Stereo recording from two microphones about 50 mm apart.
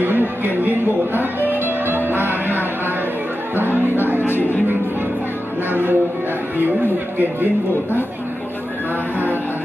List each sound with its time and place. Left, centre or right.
0.0 s speech: right
1.6 s music: right
4.3 s music: left
5.7 s music: right